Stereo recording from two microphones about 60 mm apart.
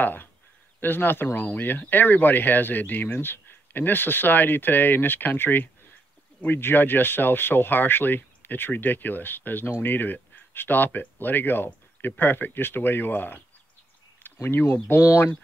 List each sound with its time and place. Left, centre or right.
0.0 s speech: left
14.2 s a sound: left
14.7 s speech: left